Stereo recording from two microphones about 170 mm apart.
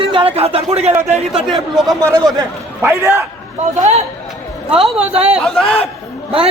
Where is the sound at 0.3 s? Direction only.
35° right (ahead or behind).